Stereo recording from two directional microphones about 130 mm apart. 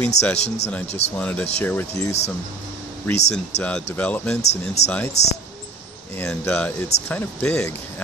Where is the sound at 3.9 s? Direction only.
10° left (ahead or behind).